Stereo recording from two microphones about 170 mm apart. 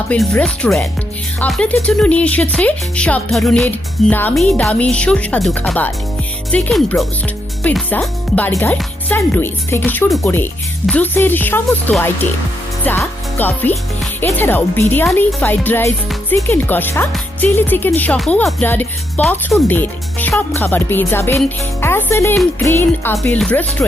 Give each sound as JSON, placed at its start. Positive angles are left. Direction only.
{"t": 0.1, "sound": "speech", "side_deg": 5}
{"t": 13.3, "sound": "speech", "side_deg": 10}